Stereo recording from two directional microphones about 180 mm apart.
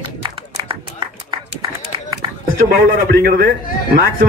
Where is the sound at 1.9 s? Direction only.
25° right (ahead or behind).